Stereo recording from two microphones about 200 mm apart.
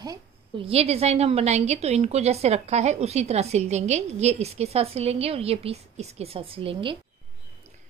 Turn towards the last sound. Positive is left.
turn(degrees=-25)  # may be behind; listen again after turning